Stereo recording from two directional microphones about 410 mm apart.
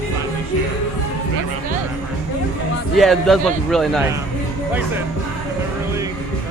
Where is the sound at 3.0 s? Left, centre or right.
Centre.